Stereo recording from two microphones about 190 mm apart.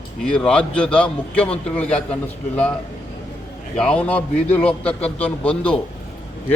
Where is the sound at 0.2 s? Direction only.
5° left (ahead or behind).